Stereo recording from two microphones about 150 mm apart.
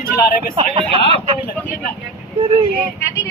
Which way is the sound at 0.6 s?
40° right (ahead or behind).